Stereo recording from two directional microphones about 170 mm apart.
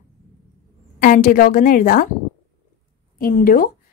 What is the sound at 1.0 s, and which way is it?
A woman's voice, 55° left (ahead or behind).